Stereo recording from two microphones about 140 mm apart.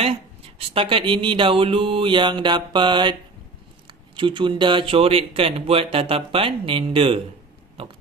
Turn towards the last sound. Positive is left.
turn(degrees=-40)  # may be behind; listen again after turning